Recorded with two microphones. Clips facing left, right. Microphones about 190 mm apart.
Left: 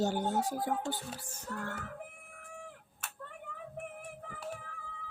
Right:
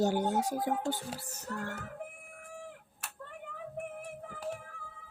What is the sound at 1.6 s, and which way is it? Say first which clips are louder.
Speech: even; 5° right (ahead or behind).